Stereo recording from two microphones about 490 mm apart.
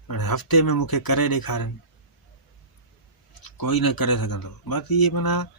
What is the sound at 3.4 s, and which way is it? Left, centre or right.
Speech, left.